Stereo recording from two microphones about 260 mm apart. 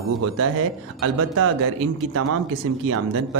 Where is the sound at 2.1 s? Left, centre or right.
Right.